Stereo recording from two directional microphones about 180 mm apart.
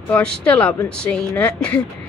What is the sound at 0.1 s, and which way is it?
Speech, 5° left (ahead or behind).